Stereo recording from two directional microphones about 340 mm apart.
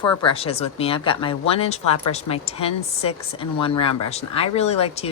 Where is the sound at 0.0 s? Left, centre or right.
Centre.